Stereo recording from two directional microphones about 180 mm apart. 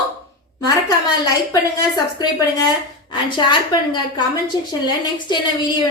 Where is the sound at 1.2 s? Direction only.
20° left (ahead or behind).